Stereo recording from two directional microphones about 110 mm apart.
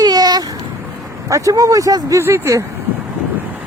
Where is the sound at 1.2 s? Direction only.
30° right (ahead or behind).